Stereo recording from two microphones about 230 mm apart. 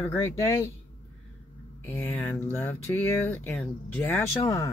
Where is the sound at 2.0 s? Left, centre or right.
Centre.